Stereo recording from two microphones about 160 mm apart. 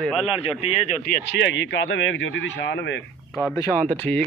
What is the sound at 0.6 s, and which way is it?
Speech, 40° left (ahead or behind).